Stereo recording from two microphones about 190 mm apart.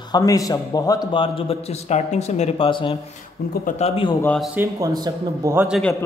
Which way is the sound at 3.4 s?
55° left (ahead or behind).